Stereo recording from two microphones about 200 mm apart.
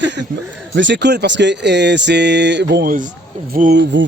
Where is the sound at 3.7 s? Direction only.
60° right (ahead or behind).